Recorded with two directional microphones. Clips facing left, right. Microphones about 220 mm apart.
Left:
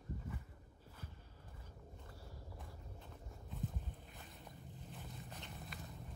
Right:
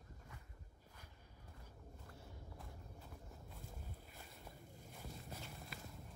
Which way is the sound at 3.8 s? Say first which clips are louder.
Left 1 dB; centre (ahead or behind).